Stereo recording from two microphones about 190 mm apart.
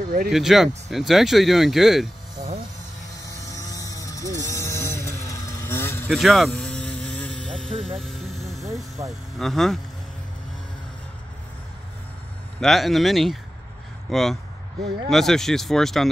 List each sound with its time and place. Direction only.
0.3 s speech: centre (ahead or behind)
3.3 s vehicle: 15° left (ahead or behind)
6.0 s vehicle: centre (ahead or behind)
9.4 s speech: centre (ahead or behind)
12.5 s speech: centre (ahead or behind)